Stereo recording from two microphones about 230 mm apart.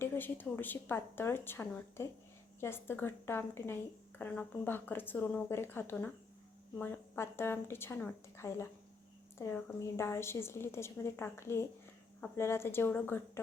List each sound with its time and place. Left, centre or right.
0.0 s a woman's voice: centre